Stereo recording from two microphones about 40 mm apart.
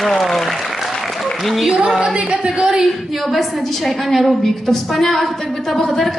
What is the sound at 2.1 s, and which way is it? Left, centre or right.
Speech, right.